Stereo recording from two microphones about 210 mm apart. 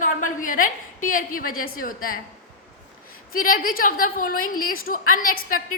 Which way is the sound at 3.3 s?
40° left (ahead or behind).